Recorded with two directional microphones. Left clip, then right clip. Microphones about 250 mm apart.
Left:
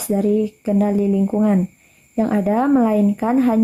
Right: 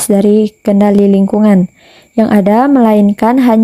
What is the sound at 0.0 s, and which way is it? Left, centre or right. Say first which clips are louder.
Speech: right 10 dB; right.